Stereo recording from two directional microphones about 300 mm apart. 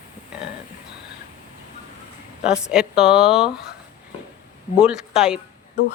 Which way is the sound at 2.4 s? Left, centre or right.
Centre.